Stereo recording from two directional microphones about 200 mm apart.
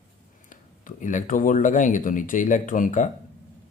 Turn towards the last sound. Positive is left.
turn(degrees=40)  # may be behind; listen again after turning